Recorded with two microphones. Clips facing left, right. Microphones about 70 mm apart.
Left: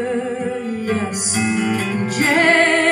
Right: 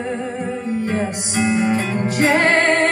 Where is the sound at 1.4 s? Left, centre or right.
Right.